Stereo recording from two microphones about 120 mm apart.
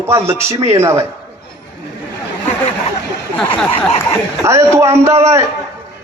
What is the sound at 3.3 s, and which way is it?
Speech, 10° left (ahead or behind).